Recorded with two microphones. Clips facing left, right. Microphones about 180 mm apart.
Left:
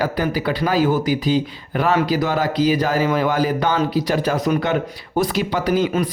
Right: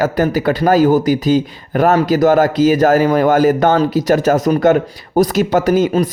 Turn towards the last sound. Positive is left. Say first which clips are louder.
# right 6 dB
turn(degrees=-45)  # may be behind; listen again after turning